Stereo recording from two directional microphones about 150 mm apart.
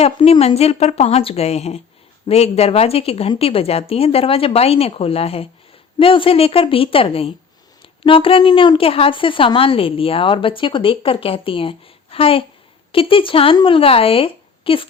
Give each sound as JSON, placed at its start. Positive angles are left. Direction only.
{"t": 0.2, "sound": "a woman's voice", "side_deg": 40}